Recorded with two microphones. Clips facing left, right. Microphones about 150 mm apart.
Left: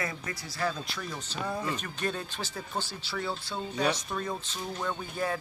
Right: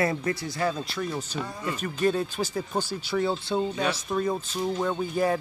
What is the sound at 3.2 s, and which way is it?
Speech, 25° right (ahead or behind).